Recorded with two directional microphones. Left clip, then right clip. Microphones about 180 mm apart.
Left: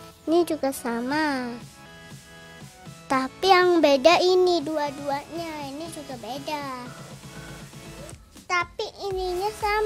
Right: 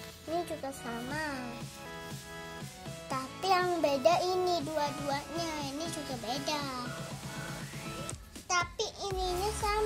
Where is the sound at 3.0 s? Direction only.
55° left (ahead or behind).